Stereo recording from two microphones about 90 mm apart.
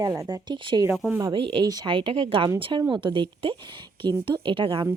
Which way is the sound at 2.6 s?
60° right (ahead or behind).